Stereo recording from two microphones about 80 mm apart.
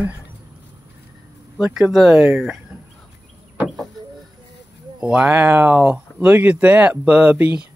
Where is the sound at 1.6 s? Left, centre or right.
Centre.